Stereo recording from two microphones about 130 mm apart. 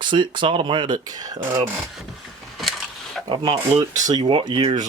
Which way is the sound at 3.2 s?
30° right (ahead or behind).